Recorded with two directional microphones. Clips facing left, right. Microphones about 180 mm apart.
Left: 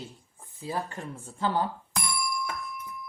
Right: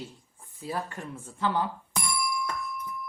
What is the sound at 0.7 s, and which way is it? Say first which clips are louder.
Speech: left 1 dB; 30° left (ahead or behind).